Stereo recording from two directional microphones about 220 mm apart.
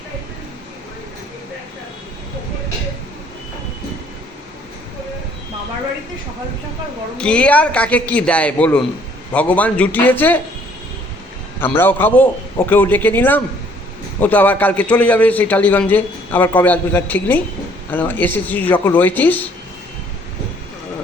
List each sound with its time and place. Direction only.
7.2 s a man's voice: 5° left (ahead or behind)
11.6 s a man's voice: 10° left (ahead or behind)